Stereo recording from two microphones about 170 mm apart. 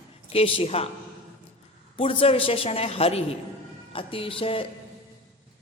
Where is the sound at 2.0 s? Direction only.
35° left (ahead or behind).